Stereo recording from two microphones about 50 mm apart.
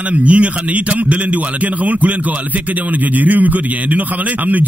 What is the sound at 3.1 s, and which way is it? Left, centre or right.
Speech, right.